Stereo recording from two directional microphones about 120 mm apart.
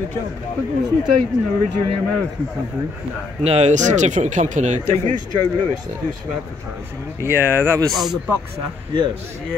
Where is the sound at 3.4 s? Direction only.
65° right (ahead or behind); by 5.1 s 90° right.